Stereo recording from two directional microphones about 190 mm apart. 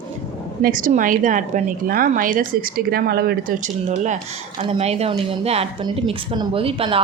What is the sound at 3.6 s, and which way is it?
A woman's voice, 40° right (ahead or behind).